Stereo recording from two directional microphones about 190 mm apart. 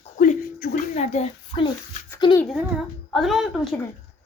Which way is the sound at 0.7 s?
35° left (ahead or behind).